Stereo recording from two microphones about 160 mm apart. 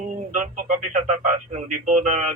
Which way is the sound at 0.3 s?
55° right (ahead or behind).